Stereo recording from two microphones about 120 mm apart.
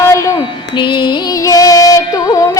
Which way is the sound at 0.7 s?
40° left (ahead or behind).